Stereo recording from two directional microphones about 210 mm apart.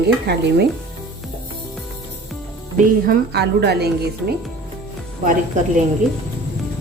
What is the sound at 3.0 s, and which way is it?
Speech, 45° right (ahead or behind).